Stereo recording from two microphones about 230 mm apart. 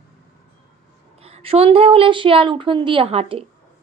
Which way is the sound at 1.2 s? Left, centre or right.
Right.